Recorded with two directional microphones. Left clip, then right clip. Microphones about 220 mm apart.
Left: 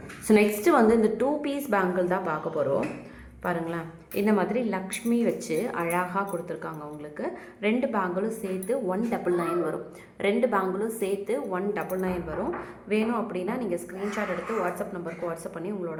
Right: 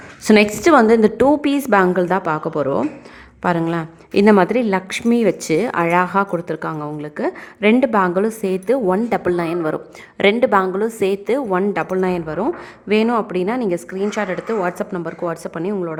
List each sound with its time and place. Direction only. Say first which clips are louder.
0.3 s a woman's voice: right 9 dB; 40° right (ahead or behind)